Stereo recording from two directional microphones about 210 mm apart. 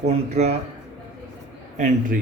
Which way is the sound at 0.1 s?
30° right (ahead or behind).